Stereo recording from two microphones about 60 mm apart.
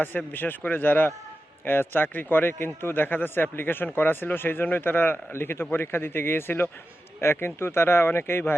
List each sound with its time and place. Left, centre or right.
0.0 s a man's voice: left